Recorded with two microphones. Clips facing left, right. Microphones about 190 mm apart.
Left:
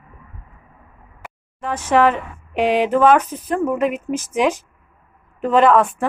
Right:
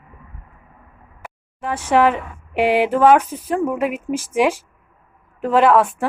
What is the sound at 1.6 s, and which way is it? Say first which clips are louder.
Speech: even; 10° right (ahead or behind).